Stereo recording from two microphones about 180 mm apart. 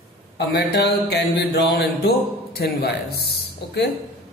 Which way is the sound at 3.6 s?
70° left (ahead or behind).